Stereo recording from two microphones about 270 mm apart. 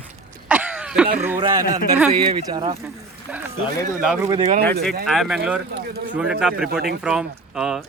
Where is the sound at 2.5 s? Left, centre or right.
Centre.